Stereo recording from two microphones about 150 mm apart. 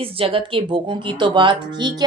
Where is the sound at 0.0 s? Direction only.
35° right (ahead or behind).